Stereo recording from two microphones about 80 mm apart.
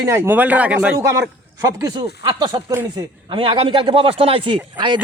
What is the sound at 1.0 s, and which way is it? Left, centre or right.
Speech, right.